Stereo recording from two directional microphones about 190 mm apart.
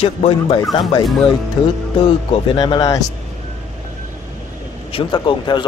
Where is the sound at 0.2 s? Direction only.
35° left (ahead or behind).